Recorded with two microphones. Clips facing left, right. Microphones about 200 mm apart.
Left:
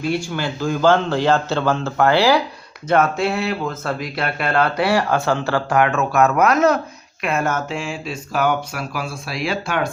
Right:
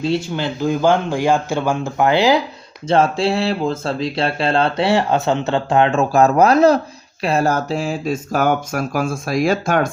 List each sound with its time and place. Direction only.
0.0 s a man's voice: 20° right (ahead or behind); by 9.9 s 45° right (ahead or behind)